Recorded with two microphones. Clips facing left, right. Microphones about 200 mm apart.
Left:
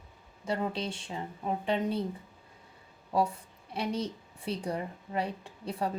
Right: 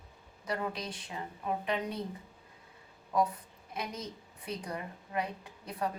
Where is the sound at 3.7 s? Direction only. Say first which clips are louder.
Left 7 dB; 30° left (ahead or behind).